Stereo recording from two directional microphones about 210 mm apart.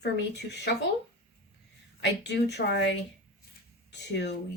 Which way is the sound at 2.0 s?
55° left (ahead or behind).